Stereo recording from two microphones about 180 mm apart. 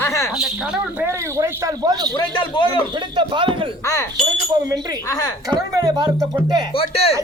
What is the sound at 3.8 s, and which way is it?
A man's voice, 20° left (ahead or behind).